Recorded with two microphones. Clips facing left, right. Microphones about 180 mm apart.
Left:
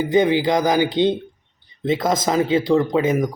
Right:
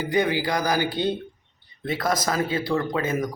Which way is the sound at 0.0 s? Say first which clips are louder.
Left 6 dB; 20° left (ahead or behind).